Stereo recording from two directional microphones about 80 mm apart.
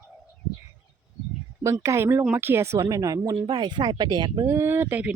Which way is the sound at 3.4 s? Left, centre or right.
Right.